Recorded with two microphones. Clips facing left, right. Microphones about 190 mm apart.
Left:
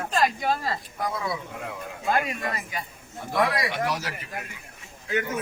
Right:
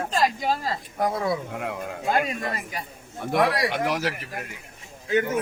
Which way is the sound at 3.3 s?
55° right (ahead or behind).